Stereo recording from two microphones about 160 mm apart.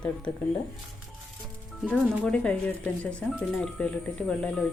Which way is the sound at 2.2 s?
5° left (ahead or behind).